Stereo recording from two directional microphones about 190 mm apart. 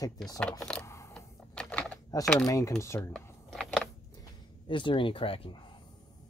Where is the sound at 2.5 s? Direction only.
15° left (ahead or behind).